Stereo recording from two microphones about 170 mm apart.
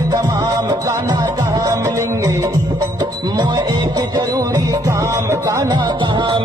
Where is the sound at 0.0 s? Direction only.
20° right (ahead or behind).